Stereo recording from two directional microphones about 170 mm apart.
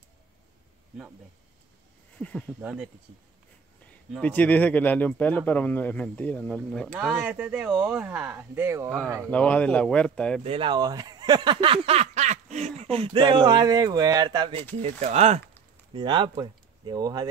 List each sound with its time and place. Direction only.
2.1 s speech: 5° left (ahead or behind)
2.6 s speech: 5° right (ahead or behind)
4.2 s speech: 10° left (ahead or behind)
7.0 s speech: 5° right (ahead or behind)
9.2 s speech: 5° left (ahead or behind)
10.4 s speech: 30° right (ahead or behind)
14.8 s speech: 40° right (ahead or behind)
15.9 s speech: 30° right (ahead or behind)